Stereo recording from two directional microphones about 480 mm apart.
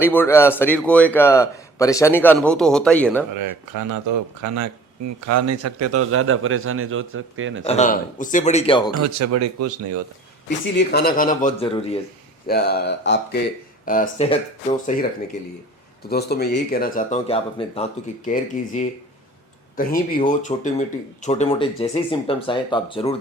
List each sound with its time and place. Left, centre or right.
0.0 s a man's voice: centre
3.3 s a man's voice: right
7.6 s speech: centre
8.9 s speech: right
10.8 s speech: centre
16.0 s speech: centre